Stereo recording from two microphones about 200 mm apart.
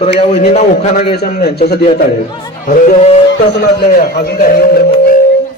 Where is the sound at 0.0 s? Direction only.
30° left (ahead or behind).